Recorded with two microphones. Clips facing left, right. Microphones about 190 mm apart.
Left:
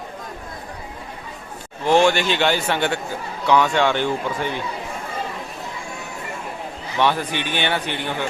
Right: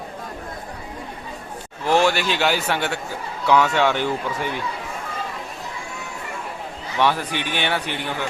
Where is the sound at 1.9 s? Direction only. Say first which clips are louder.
Left 2 dB; 5° right (ahead or behind).